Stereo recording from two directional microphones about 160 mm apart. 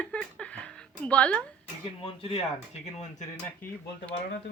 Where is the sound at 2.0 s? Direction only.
35° left (ahead or behind).